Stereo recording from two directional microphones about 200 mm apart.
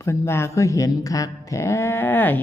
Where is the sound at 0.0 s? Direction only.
15° left (ahead or behind).